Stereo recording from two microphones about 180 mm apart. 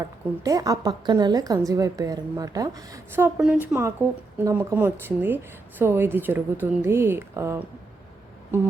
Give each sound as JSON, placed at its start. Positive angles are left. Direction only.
{"t": 0.0, "sound": "a woman's voice", "side_deg": -20}